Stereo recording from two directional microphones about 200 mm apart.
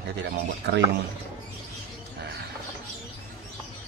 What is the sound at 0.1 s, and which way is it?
Speech, 60° right (ahead or behind).